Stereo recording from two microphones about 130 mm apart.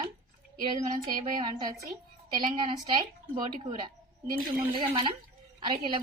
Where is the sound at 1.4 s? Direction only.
35° right (ahead or behind).